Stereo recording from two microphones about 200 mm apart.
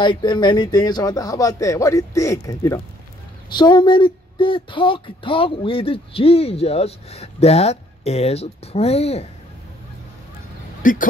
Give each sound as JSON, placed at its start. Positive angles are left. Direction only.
{"t": 0.0, "sound": "speech", "side_deg": 25}
{"t": 10.8, "sound": "speech", "side_deg": 40}